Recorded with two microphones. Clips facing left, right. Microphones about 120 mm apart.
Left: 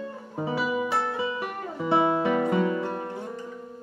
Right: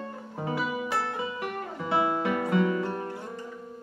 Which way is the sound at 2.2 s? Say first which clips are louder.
Left 2 dB; 25° left (ahead or behind).